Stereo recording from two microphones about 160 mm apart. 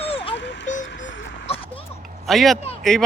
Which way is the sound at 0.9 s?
90° left.